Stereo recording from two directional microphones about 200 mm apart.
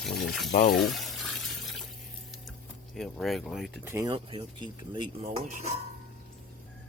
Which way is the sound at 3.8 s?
15° right (ahead or behind).